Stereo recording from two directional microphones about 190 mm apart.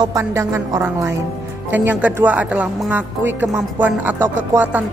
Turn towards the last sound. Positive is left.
turn(degrees=-10)  # may be behind; listen again after turning